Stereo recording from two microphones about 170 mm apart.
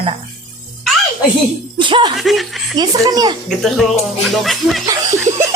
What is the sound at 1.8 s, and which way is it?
Speech, 30° right (ahead or behind).